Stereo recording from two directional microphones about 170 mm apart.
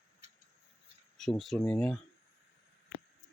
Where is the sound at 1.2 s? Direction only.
Centre (ahead or behind).